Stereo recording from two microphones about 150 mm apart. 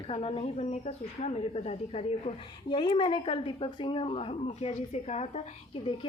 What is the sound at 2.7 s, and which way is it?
Speech, 35° left (ahead or behind).